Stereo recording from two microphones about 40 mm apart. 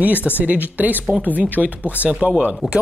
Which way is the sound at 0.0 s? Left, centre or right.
Right.